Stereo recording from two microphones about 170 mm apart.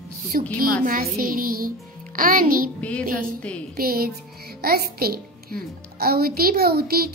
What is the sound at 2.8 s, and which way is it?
Speech, 5° left (ahead or behind).